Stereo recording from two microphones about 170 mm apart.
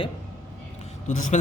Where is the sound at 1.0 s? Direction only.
45° left (ahead or behind).